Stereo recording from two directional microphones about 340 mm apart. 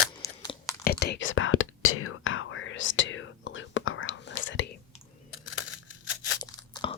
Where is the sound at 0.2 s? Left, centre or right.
Centre.